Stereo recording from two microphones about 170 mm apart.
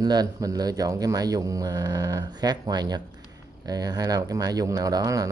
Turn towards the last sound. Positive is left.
turn(degrees=-20)  # may be behind; listen again after turning